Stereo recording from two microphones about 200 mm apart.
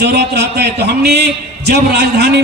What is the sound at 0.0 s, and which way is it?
A man's voice, 55° right (ahead or behind).